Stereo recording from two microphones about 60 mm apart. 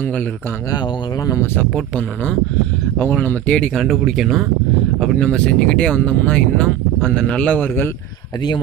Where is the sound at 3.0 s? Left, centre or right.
Left.